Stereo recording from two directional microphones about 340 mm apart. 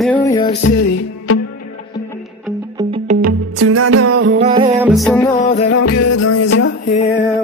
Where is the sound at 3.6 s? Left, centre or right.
Right.